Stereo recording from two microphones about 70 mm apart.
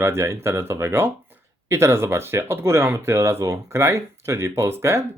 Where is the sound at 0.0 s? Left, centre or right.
Right.